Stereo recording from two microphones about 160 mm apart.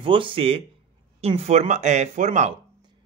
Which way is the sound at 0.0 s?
30° right (ahead or behind).